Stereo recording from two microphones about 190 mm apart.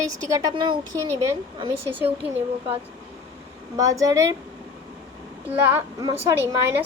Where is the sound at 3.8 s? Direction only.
15° right (ahead or behind).